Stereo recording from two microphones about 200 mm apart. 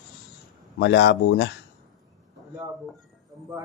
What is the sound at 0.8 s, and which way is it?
Speech, 60° left (ahead or behind).